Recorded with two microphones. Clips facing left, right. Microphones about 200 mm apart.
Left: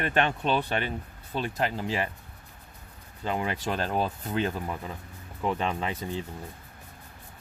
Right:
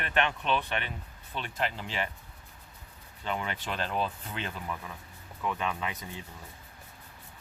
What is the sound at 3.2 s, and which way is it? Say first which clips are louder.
Speech: left 5 dB; 30° left (ahead or behind).